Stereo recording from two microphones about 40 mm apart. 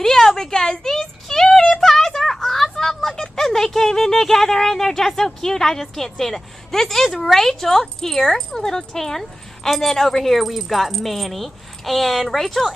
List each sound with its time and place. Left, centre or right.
0.0 s a woman's voice: centre